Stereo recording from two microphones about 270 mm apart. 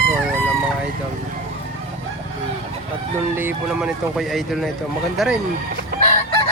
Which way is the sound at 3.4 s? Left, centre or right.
Centre.